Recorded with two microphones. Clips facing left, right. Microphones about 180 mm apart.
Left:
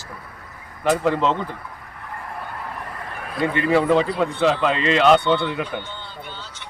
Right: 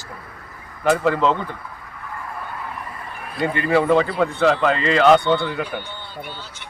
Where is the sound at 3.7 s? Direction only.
Centre (ahead or behind).